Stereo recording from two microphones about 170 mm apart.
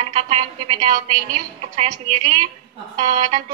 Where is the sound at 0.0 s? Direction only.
45° right (ahead or behind).